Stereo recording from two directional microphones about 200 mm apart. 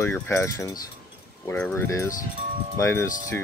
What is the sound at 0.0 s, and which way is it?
Speech, 15° left (ahead or behind).